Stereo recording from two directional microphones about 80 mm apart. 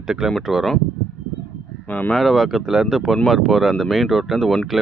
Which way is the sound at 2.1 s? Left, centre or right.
Centre.